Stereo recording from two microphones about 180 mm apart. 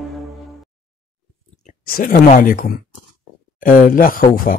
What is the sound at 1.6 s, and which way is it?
Speech, 50° left (ahead or behind).